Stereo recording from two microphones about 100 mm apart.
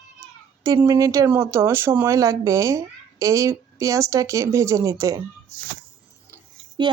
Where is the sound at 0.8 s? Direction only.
30° right (ahead or behind).